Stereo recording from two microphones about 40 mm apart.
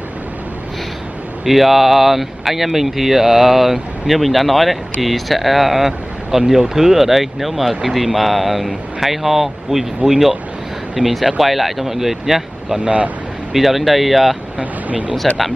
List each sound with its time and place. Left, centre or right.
1.4 s speech: centre
12.8 s speech: right
13.5 s speech: centre
14.6 s speech: right